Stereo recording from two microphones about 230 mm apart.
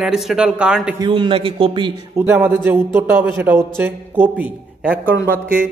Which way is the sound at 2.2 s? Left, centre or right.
Centre.